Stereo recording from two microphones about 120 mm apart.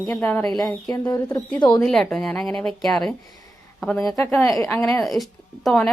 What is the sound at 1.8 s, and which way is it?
A woman's voice, 5° left (ahead or behind).